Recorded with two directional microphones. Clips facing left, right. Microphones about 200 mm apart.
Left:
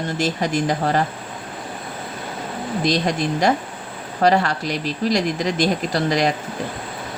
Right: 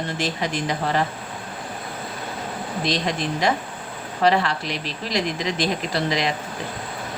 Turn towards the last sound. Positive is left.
turn(degrees=45)  # may be behind; listen again after turning